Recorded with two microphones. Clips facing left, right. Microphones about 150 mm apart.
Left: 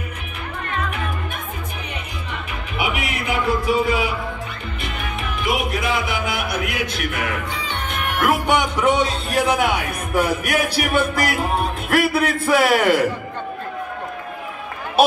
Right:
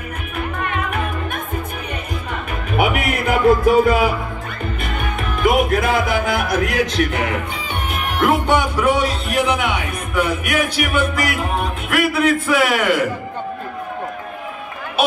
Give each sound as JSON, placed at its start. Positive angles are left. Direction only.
{"t": 2.7, "sound": "music", "side_deg": -50}
{"t": 7.0, "sound": "speech", "side_deg": -30}
{"t": 7.9, "sound": "music", "side_deg": 0}
{"t": 8.5, "sound": "music", "side_deg": 20}